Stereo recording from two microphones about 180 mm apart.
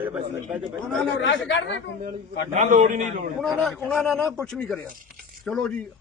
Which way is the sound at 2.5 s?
45° right (ahead or behind).